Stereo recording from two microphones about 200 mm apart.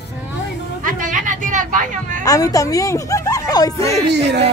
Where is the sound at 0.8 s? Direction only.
40° right (ahead or behind).